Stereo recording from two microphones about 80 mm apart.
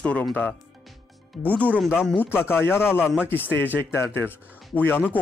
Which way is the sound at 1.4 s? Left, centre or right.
Centre.